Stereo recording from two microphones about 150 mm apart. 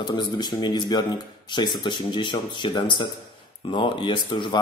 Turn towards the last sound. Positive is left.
turn(degrees=30)  # may be behind; listen again after turning